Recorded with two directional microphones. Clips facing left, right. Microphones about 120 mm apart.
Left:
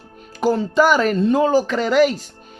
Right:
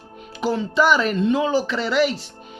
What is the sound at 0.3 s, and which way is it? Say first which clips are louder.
Speech: left 4 dB; 45° left (ahead or behind).